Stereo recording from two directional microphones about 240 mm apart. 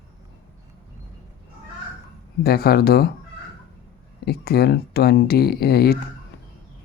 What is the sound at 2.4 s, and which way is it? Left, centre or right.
Speech, left.